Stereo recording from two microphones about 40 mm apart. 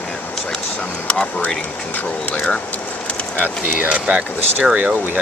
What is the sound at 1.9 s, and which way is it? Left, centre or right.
Speech, left.